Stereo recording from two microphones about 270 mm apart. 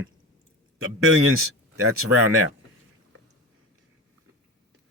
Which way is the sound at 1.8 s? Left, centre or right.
Right.